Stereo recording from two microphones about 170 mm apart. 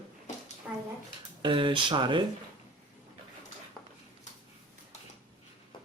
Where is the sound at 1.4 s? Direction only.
30° right (ahead or behind).